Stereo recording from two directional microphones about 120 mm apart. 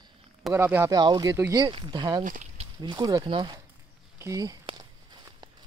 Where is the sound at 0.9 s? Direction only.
35° right (ahead or behind).